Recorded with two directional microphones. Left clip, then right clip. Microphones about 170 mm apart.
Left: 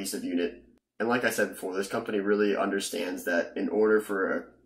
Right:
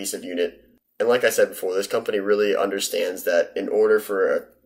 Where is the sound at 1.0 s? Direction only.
15° right (ahead or behind).